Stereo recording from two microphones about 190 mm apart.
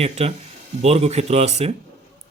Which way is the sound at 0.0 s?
35° right (ahead or behind).